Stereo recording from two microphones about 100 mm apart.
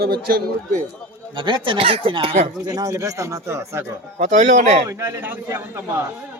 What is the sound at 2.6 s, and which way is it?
Speech, 40° right (ahead or behind).